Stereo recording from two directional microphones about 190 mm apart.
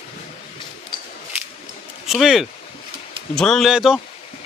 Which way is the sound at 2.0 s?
Centre (ahead or behind).